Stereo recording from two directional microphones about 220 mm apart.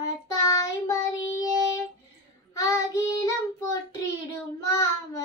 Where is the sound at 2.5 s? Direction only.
15° left (ahead or behind).